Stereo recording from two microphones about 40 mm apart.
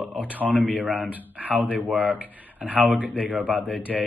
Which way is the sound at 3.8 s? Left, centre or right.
Right.